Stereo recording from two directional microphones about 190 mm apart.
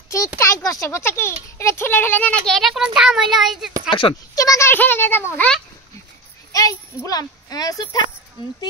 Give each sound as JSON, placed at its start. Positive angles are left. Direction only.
{"t": 0.4, "sound": "a child's voice", "side_deg": 15}
{"t": 3.9, "sound": "a child's voice", "side_deg": 25}